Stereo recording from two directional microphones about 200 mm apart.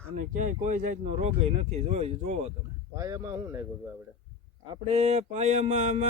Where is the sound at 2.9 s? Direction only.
15° right (ahead or behind).